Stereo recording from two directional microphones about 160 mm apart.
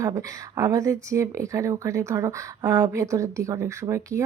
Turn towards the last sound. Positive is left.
turn(degrees=-20)  # may be behind; listen again after turning